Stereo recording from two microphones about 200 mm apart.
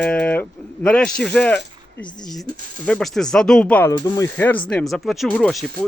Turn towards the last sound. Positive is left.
turn(degrees=5)  # may be behind; listen again after turning